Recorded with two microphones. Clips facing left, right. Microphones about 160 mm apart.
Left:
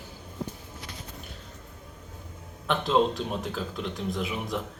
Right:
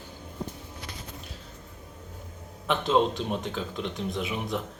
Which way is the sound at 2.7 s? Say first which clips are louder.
Even; centre (ahead or behind).